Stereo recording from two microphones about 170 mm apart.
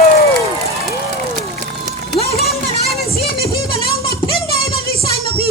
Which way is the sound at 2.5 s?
Centre (ahead or behind).